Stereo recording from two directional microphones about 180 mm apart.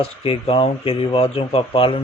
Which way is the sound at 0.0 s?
35° left (ahead or behind).